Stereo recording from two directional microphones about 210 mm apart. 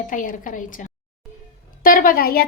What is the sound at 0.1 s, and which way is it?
A woman's voice, 40° left (ahead or behind).